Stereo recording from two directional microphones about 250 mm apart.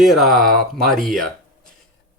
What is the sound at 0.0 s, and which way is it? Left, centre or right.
Speech, centre.